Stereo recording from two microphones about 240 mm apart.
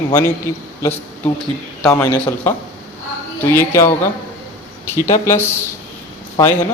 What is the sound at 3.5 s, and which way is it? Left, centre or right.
Speech, centre.